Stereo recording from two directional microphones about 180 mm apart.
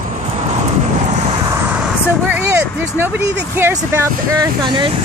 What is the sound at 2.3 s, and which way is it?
Speech, 15° right (ahead or behind).